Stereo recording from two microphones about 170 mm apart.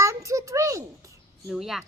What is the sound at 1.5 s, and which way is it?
Speech, centre (ahead or behind).